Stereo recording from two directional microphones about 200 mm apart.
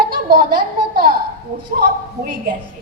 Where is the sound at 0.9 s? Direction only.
50° right (ahead or behind).